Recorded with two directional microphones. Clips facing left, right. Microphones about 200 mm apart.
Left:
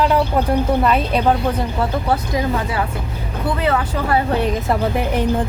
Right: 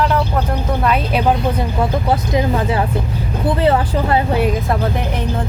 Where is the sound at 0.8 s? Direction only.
5° right (ahead or behind); by 4.3 s 20° right (ahead or behind).